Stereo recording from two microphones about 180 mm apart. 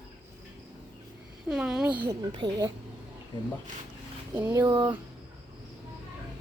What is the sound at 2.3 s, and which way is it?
Speech, 25° right (ahead or behind).